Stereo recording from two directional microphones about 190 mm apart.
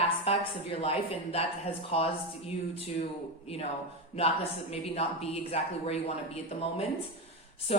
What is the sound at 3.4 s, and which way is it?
Speech, 30° left (ahead or behind).